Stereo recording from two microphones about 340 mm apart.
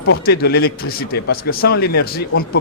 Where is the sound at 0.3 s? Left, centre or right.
Left.